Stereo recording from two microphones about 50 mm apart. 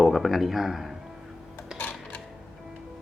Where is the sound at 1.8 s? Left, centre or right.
Left.